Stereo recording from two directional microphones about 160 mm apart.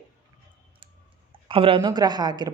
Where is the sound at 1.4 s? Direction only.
35° right (ahead or behind).